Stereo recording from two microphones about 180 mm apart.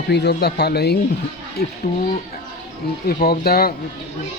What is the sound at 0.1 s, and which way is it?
Speech, 70° left (ahead or behind).